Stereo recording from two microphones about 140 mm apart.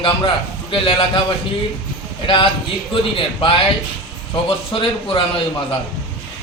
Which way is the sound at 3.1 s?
40° left (ahead or behind).